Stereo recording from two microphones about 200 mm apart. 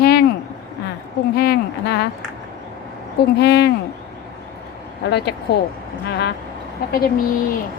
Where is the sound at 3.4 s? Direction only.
55° left (ahead or behind).